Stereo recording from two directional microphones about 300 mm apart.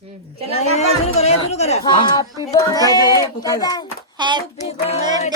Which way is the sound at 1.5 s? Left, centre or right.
Left.